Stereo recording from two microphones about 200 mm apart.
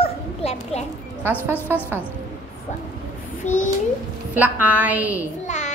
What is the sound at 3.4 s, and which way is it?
Speech, 40° left (ahead or behind).